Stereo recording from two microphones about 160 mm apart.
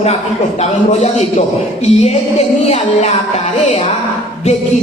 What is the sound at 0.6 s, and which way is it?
A man's voice, 45° left (ahead or behind).